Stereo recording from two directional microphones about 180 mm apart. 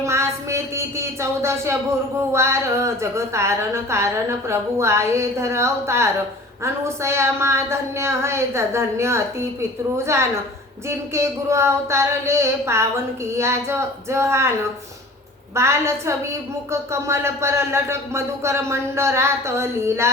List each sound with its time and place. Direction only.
0.0 s speech: 15° right (ahead or behind)
15.5 s speech: 15° right (ahead or behind)